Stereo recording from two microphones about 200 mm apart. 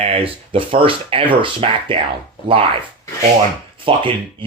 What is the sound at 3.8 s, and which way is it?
Speech, 25° right (ahead or behind).